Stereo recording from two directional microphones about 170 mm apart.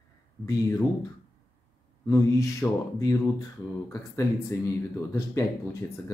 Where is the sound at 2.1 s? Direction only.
20° left (ahead or behind).